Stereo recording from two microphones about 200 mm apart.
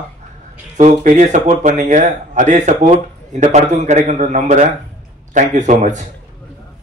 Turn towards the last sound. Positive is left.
turn(degrees=-35)  # may be behind; listen again after turning